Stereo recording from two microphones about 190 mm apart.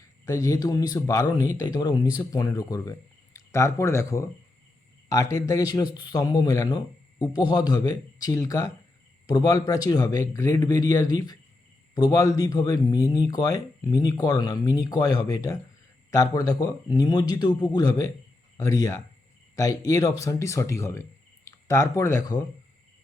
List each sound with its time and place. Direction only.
0.0 s speech: 15° left (ahead or behind)